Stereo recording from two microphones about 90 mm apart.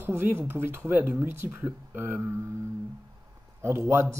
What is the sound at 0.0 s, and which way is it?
A man's voice, 25° right (ahead or behind).